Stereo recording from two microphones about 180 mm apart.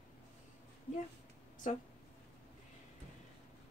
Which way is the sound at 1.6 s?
45° left (ahead or behind).